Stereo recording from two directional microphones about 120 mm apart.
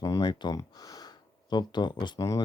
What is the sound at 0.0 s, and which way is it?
Speech, 35° left (ahead or behind).